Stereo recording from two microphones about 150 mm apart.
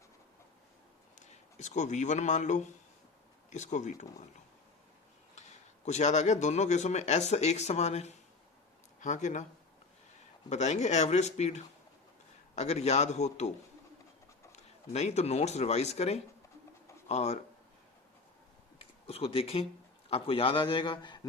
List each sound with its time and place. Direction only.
1.2 s speech: 50° left (ahead or behind)
5.5 s speech: 50° left (ahead or behind)
10.5 s speech: 50° left (ahead or behind)
14.5 s speech: 50° left (ahead or behind)
19.0 s a man's voice: 40° left (ahead or behind)